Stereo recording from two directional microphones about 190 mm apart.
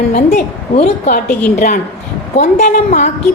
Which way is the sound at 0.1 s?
35° left (ahead or behind).